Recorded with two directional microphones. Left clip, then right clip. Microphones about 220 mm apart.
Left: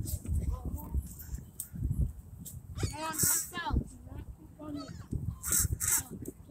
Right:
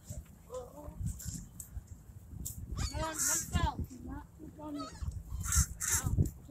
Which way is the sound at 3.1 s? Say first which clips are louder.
Left 2 dB; 30° left (ahead or behind).